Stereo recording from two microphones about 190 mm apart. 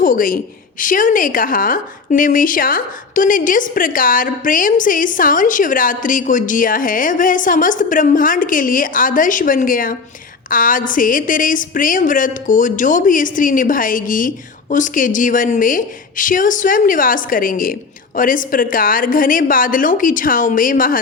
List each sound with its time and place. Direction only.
0.0 s a woman's voice: 45° left (ahead or behind)